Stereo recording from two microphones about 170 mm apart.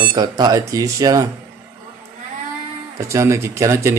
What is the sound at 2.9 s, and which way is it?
Speech, 15° right (ahead or behind).